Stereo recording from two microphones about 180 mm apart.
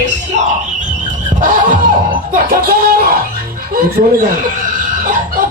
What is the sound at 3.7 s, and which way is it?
Speech, 50° right (ahead or behind).